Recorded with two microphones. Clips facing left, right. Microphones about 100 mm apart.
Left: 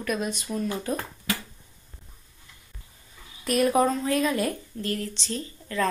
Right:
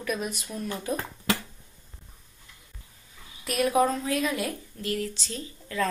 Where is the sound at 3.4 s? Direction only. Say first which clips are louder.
Left 2 dB; centre (ahead or behind).